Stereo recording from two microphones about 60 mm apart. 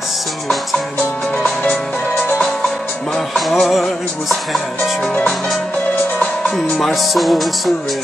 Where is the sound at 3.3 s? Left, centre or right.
Centre.